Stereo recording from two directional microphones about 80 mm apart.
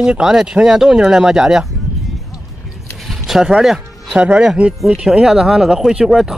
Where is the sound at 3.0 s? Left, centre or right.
Centre.